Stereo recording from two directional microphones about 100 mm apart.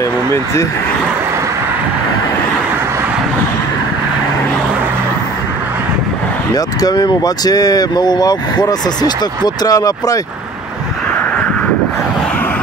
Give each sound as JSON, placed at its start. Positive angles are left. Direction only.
{"t": 6.5, "sound": "speech", "side_deg": 40}